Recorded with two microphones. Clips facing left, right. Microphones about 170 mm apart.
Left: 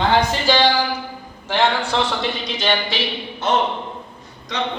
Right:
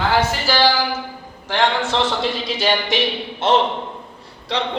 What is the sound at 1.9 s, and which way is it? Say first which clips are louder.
Speech: right 1 dB; centre (ahead or behind).